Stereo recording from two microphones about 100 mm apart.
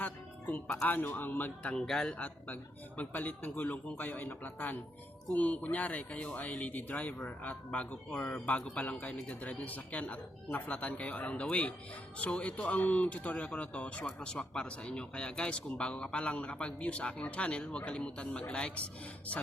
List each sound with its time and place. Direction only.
0.0 s music: 20° left (ahead or behind)
0.9 s speech: 20° left (ahead or behind)